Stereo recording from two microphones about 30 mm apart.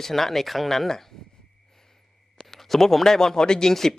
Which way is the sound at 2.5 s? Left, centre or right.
Centre.